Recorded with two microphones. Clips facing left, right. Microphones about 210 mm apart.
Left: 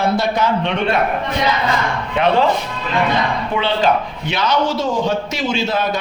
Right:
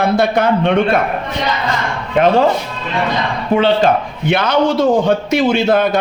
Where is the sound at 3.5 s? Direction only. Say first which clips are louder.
Right 8 dB; 45° right (ahead or behind).